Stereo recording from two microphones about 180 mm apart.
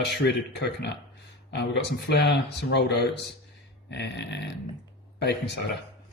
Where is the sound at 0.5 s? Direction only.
70° left (ahead or behind).